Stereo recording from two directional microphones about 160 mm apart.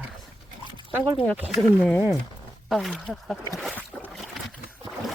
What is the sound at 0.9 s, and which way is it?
Speech, 15° right (ahead or behind).